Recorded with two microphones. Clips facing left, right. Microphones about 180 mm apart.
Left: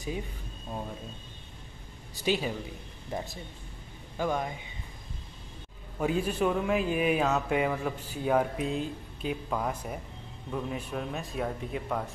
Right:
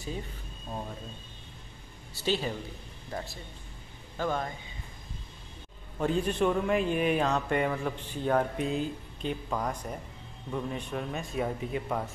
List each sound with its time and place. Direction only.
2.1 s speech: 10° left (ahead or behind)
5.9 s a man's voice: 10° left (ahead or behind)